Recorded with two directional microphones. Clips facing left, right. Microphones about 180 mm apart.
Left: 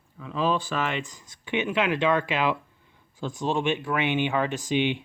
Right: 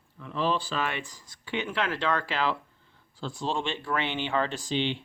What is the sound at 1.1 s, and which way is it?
Speech, 20° left (ahead or behind).